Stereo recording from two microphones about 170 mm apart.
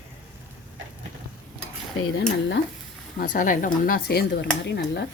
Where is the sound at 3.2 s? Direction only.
50° left (ahead or behind); by 5.0 s 75° left (ahead or behind).